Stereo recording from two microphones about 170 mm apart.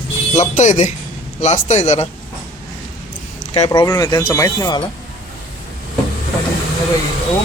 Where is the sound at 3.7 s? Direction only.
20° left (ahead or behind).